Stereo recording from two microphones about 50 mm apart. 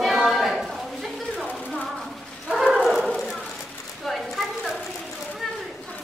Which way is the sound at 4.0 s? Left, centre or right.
Centre.